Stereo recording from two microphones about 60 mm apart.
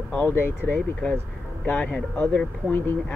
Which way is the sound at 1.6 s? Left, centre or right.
Left.